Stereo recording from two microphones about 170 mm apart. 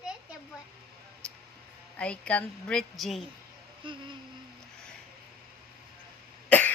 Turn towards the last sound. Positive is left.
turn(degrees=10)  # may be behind; listen again after turning